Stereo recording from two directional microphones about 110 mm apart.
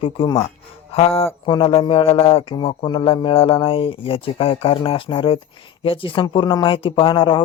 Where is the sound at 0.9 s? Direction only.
60° left (ahead or behind).